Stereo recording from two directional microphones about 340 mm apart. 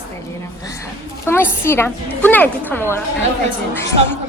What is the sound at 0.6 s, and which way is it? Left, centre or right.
A woman's voice, centre.